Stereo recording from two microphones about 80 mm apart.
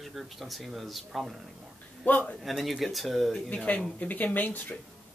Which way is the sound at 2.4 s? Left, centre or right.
Centre.